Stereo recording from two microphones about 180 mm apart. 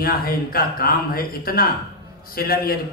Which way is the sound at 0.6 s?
55° left (ahead or behind).